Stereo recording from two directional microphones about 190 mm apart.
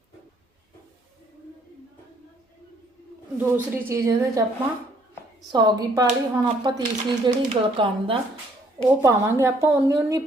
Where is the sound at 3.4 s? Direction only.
10° right (ahead or behind).